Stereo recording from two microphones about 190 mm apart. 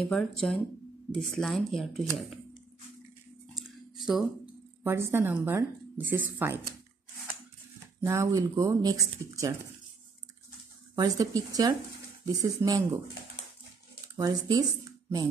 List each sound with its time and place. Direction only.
0.0 s speech: 5° left (ahead or behind)
3.5 s a sound: centre (ahead or behind)
4.8 s speech: 15° right (ahead or behind)
8.0 s speech: 15° right (ahead or behind)
11.0 s speech: 20° right (ahead or behind)
14.0 s speech: 20° right (ahead or behind)